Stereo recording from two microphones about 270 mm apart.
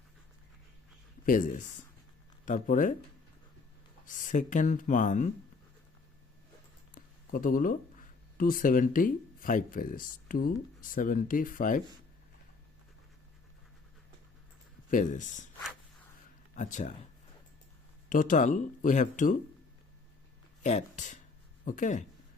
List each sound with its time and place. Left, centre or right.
1.2 s speech: left
4.0 s speech: left
6.9 s speech: left
14.8 s speech: left
16.6 s speech: left
18.1 s speech: left
20.6 s speech: left